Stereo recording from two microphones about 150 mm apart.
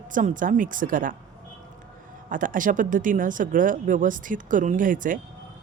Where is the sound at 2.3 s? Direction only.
65° right (ahead or behind).